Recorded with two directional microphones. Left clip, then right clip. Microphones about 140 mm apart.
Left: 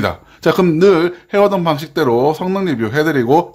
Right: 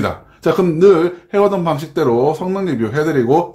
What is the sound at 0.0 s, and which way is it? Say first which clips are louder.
Speech: left 2 dB; 35° left (ahead or behind).